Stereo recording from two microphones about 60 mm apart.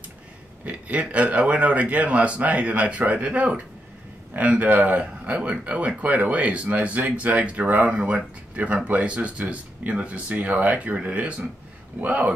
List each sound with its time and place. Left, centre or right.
0.7 s speech: right